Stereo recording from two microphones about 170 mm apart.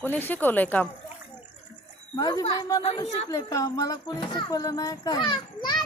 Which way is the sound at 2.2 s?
20° left (ahead or behind).